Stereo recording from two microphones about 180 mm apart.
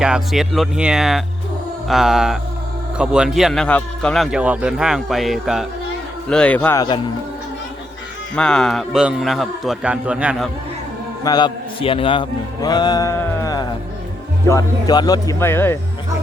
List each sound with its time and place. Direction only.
0.0 s speech: 5° right (ahead or behind)
8.4 s speech: 5° left (ahead or behind)
11.2 s a man's voice: 20° left (ahead or behind)